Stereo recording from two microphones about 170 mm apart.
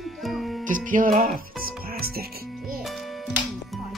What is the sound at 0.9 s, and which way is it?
Music, 50° right (ahead or behind).